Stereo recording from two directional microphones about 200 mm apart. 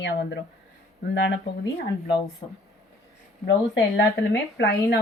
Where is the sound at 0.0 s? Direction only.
60° left (ahead or behind).